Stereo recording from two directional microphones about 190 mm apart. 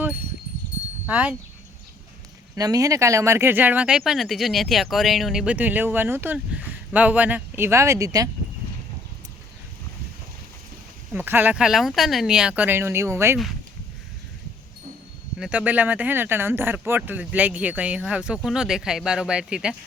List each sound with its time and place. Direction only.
1.0 s speech: 5° right (ahead or behind)
2.6 s speech: 20° right (ahead or behind)
11.1 s speech: 10° right (ahead or behind)
15.4 s speech: 5° right (ahead or behind)